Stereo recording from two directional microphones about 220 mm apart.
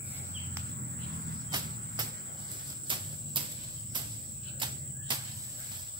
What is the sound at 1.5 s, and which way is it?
Cricket, 20° right (ahead or behind).